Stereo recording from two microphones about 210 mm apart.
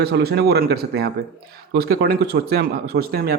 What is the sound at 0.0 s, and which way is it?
Speech, 50° right (ahead or behind).